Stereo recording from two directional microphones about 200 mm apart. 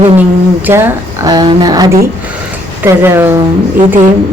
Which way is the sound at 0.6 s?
10° right (ahead or behind).